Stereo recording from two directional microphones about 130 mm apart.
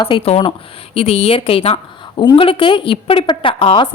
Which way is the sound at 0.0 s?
45° left (ahead or behind).